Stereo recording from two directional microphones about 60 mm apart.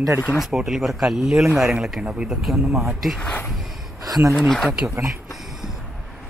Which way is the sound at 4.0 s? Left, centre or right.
Right.